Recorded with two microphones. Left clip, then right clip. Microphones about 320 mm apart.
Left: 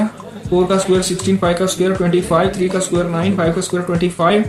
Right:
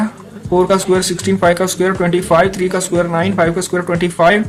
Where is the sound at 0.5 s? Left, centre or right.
Right.